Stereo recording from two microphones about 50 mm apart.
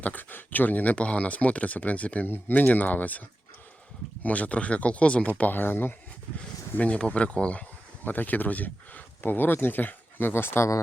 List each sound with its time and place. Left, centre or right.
0.0 s speech: left
0.9 s speech: left
5.4 s speech: left
6.7 s speech: left
8.0 s speech: left